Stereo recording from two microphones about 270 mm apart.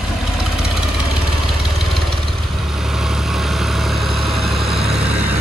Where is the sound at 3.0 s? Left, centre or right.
Centre.